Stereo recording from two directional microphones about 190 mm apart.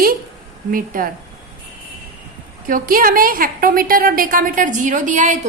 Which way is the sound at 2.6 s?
45° right (ahead or behind).